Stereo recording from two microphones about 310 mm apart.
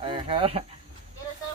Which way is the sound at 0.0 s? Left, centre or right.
Centre.